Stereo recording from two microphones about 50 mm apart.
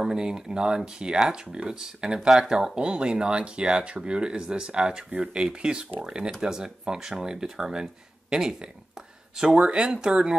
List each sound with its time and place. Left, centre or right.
0.0 s speech: centre
9.8 s speech: centre